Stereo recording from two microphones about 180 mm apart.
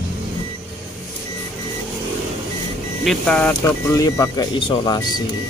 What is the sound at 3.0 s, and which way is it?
Speech, 5° left (ahead or behind).